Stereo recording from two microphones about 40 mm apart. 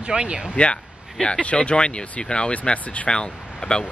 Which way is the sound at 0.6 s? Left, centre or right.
Left.